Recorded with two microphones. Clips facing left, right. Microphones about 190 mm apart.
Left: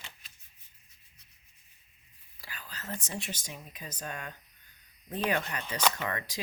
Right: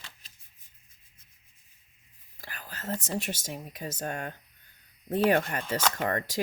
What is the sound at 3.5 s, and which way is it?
Speech, 45° right (ahead or behind).